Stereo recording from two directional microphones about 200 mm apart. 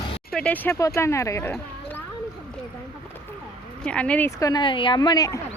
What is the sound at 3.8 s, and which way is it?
Speech, 5° left (ahead or behind).